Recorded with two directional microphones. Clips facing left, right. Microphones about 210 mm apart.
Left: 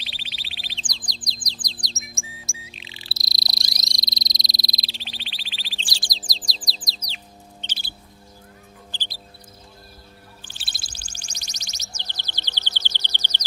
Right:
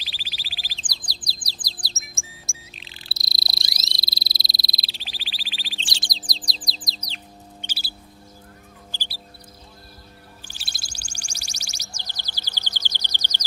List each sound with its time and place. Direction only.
0.0 s bird: centre (ahead or behind)
1.8 s music: centre (ahead or behind)
2.7 s frog: centre (ahead or behind)
5.8 s chirp: 25° right (ahead or behind)
6.1 s bird: centre (ahead or behind)
8.9 s music: 10° right (ahead or behind)
10.6 s music: centre (ahead or behind)
10.8 s music: 10° right (ahead or behind)